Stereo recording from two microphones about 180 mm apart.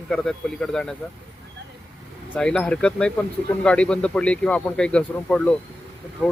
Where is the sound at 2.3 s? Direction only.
5° left (ahead or behind).